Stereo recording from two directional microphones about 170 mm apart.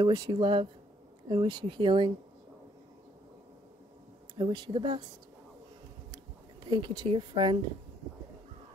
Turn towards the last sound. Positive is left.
turn(degrees=-30)  # may be behind; listen again after turning